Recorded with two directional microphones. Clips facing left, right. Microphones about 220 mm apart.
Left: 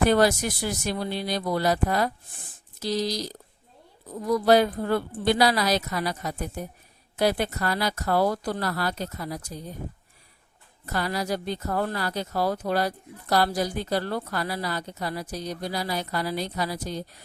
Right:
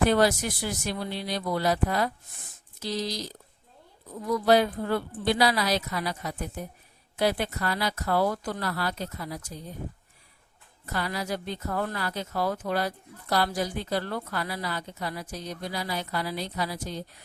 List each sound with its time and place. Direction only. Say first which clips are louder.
0.0 s speech: left 2 dB; 45° left (ahead or behind)
10.9 s speech: left 3 dB; 40° left (ahead or behind)